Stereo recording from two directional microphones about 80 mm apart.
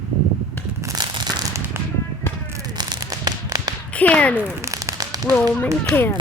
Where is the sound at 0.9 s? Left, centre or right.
Right.